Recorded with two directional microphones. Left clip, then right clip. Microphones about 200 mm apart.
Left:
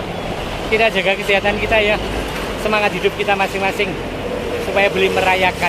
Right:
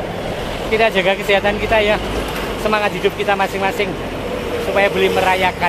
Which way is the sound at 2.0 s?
50° right (ahead or behind).